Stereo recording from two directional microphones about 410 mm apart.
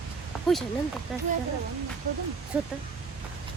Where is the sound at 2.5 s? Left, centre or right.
Centre.